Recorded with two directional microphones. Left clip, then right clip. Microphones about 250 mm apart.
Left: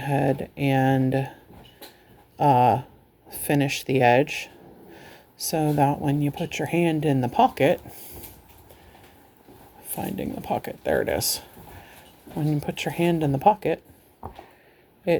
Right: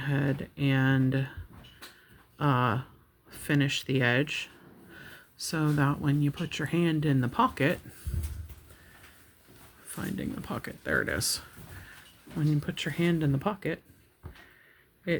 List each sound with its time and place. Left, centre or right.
0.0 s speech: centre
2.4 s speech: centre
10.0 s speech: centre
12.6 s speech: centre